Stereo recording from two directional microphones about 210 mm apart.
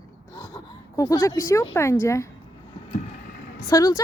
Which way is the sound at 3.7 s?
15° left (ahead or behind).